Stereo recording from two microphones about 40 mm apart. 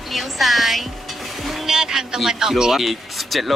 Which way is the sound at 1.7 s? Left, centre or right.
Centre.